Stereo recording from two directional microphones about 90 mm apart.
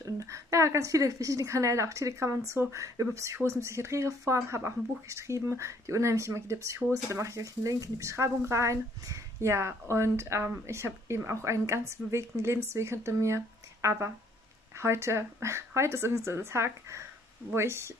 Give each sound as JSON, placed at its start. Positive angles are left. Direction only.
{"t": 0.0, "sound": "speech", "side_deg": -40}